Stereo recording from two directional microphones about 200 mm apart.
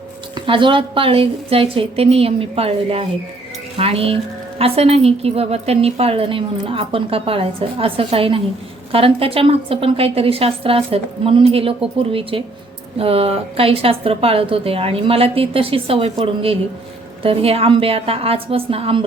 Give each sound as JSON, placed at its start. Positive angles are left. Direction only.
{"t": 0.3, "sound": "a woman's voice", "side_deg": -25}